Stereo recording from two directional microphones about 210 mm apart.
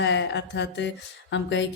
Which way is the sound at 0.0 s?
55° left (ahead or behind).